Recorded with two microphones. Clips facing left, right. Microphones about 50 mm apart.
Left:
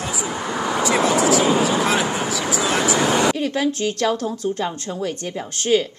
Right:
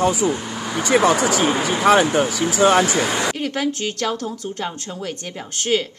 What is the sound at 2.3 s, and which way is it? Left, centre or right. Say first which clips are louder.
Speech: right 1 dB; left.